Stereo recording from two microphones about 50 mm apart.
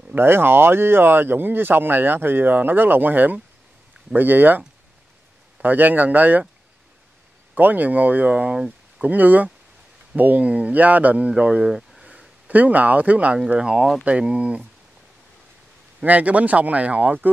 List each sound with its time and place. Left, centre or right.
0.1 s speech: right
7.5 s speech: right
8.5 s a sound: centre
9.0 s speech: right
11.6 s speech: centre
12.4 s speech: right
13.6 s speech: centre
16.0 s speech: right